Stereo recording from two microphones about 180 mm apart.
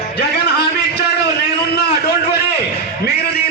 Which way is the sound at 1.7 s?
65° left (ahead or behind).